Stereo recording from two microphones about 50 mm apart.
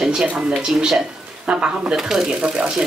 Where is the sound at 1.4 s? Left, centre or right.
Centre.